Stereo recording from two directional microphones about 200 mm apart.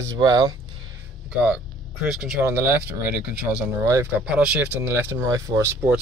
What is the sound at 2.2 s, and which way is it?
Speech, 5° right (ahead or behind).